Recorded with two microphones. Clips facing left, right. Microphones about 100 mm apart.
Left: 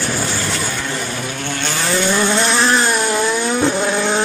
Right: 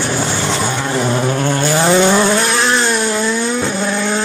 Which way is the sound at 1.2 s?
40° right (ahead or behind).